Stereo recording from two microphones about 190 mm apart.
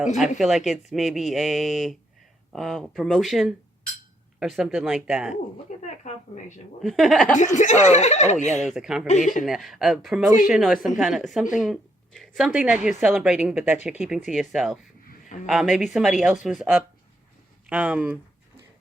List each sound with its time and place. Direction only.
0.2 s a woman's voice: centre (ahead or behind)
5.8 s a sound: 40° left (ahead or behind)
6.8 s a woman's voice: centre (ahead or behind)
7.3 s speech: 40° left (ahead or behind)
8.6 s a woman's voice: 5° right (ahead or behind)